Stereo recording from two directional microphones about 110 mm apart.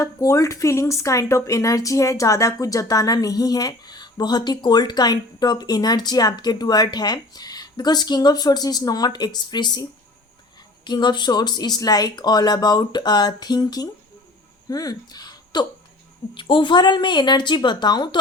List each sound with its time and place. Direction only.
0.0 s speech: 30° left (ahead or behind)
10.8 s speech: 40° left (ahead or behind)
16.3 s speech: 45° left (ahead or behind)